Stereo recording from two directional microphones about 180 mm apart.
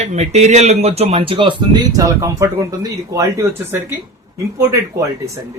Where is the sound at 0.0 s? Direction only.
35° right (ahead or behind); by 5.4 s 15° right (ahead or behind).